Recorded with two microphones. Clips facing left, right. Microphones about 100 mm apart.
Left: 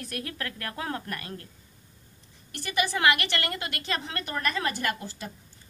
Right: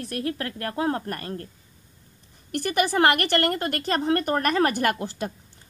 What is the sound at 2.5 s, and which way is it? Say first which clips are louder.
A woman's voice: right 6 dB; 55° right (ahead or behind).